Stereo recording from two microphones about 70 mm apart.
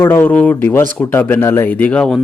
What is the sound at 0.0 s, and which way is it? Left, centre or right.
Speech, left.